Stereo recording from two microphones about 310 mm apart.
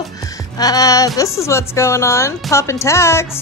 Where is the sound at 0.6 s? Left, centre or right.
Centre.